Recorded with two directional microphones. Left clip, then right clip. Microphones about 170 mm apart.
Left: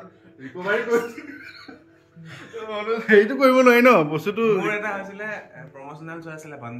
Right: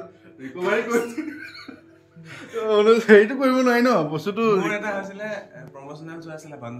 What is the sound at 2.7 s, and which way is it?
Speech, 50° right (ahead or behind).